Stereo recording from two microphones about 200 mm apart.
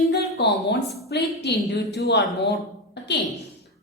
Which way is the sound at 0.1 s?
60° left (ahead or behind).